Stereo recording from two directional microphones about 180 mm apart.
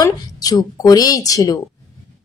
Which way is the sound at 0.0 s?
20° left (ahead or behind).